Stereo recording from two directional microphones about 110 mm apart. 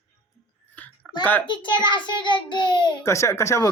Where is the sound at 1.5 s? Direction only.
45° left (ahead or behind).